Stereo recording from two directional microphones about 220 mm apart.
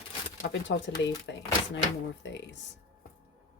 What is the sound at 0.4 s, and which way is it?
Speech, 55° left (ahead or behind).